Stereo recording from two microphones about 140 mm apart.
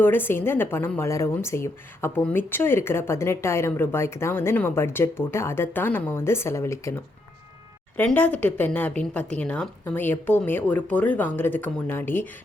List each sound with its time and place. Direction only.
0.0 s a woman's voice: 15° left (ahead or behind)
7.9 s a woman's voice: 10° left (ahead or behind)